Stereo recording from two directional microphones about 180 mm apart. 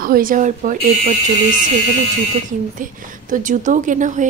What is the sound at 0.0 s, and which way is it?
A woman's voice, 50° right (ahead or behind).